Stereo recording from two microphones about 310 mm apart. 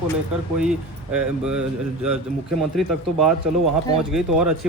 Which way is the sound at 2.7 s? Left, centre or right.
Centre.